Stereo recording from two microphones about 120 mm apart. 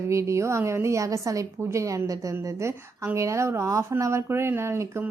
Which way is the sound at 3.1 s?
25° right (ahead or behind).